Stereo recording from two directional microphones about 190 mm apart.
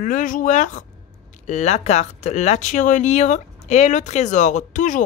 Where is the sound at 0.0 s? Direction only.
45° left (ahead or behind).